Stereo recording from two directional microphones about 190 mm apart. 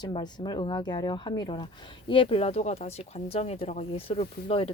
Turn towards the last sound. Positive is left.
turn(degrees=30)  # may be behind; listen again after turning